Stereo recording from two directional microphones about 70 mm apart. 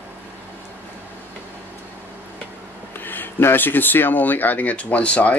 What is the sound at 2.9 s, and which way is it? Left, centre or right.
Speech, left.